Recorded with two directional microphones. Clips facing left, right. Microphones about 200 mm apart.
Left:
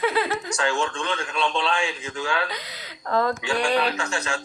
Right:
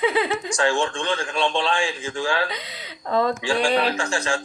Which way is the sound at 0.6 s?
30° right (ahead or behind).